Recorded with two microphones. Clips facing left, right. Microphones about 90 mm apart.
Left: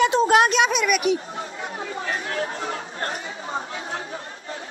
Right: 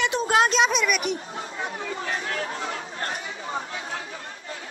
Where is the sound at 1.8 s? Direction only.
35° left (ahead or behind).